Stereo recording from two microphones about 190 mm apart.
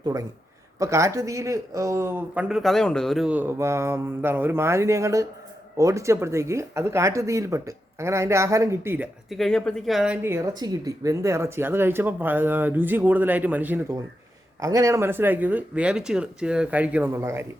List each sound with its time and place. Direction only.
0.0 s a man's voice: 15° right (ahead or behind)
9.3 s speech: centre (ahead or behind)
10.3 s speech: 20° right (ahead or behind)